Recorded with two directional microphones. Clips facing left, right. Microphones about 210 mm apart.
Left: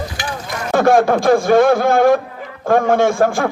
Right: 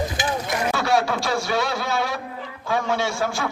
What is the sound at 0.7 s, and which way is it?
A man's voice, 50° left (ahead or behind).